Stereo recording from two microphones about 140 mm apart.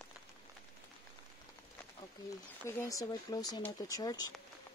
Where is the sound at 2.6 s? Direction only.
25° left (ahead or behind).